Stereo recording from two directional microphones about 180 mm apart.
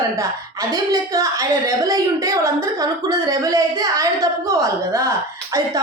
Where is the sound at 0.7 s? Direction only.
20° right (ahead or behind).